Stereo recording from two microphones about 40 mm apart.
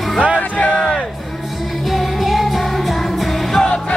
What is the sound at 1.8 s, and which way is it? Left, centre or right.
Music, centre.